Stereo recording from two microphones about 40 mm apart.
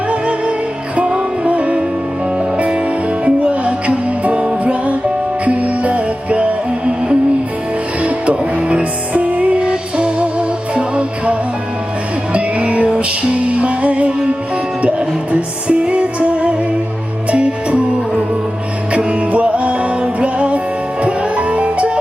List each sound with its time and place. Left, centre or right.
0.1 s music: right
3.2 s music: right
18.9 s music: right